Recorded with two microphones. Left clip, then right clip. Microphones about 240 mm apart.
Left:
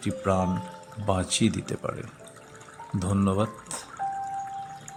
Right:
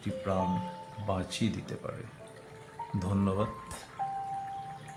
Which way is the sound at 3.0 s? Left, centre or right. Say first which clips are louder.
Left 6 dB; left.